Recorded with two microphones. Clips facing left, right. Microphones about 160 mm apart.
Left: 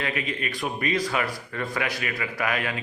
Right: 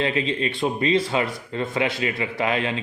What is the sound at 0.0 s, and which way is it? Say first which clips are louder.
A man's voice: right 6 dB; 25° right (ahead or behind).